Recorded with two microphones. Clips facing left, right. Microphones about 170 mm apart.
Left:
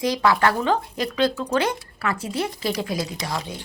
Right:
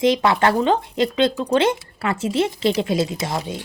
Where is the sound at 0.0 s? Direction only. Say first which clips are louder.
Right 3 dB; 25° right (ahead or behind).